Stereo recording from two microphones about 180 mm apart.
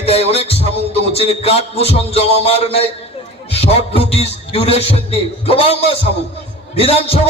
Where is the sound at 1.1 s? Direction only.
35° left (ahead or behind).